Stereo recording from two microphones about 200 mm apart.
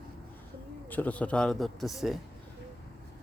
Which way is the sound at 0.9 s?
10° left (ahead or behind).